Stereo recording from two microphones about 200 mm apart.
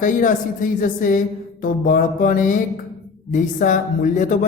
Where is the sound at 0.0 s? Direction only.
40° left (ahead or behind).